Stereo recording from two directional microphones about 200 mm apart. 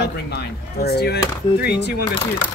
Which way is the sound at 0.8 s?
55° left (ahead or behind).